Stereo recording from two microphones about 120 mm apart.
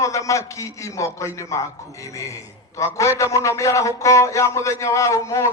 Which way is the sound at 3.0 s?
25° left (ahead or behind).